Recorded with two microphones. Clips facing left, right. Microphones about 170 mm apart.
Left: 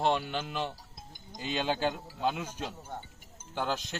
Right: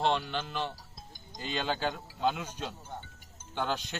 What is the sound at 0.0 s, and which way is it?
Speech, 10° left (ahead or behind).